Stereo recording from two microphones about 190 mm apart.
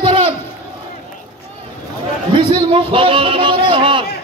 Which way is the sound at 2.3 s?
25° right (ahead or behind).